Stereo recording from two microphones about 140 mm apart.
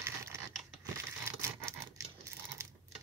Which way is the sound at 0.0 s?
20° right (ahead or behind).